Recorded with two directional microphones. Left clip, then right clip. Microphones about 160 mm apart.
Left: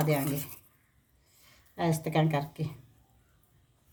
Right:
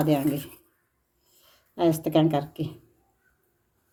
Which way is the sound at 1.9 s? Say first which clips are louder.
Right 6 dB; 20° right (ahead or behind).